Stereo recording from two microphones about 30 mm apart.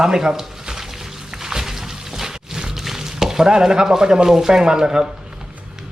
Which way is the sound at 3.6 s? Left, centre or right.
Centre.